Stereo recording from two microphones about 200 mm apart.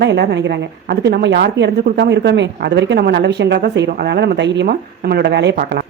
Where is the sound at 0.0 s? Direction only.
60° right (ahead or behind).